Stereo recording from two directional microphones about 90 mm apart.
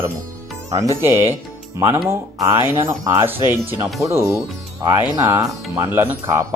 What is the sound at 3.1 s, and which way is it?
Speech, 25° right (ahead or behind).